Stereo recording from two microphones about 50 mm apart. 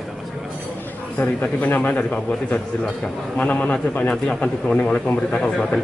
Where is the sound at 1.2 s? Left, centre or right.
Left.